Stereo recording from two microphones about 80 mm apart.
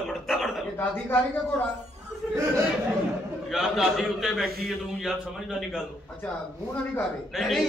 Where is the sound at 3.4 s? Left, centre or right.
Centre.